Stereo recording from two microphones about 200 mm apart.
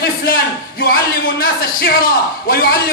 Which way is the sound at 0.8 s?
45° left (ahead or behind).